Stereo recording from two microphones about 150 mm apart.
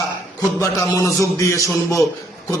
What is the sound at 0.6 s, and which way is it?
A man's voice, 20° left (ahead or behind).